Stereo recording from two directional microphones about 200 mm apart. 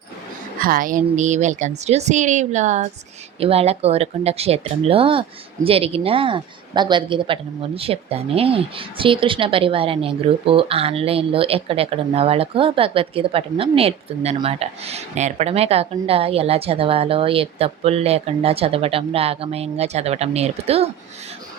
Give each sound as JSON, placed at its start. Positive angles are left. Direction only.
{"t": 0.6, "sound": "a woman's voice", "side_deg": -45}